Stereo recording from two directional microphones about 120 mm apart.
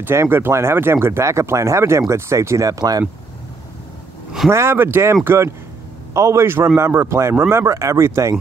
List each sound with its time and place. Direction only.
0.0 s speech: 20° right (ahead or behind)
4.5 s speech: 20° right (ahead or behind)